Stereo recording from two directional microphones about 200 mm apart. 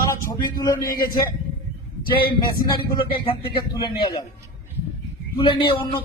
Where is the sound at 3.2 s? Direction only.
25° left (ahead or behind).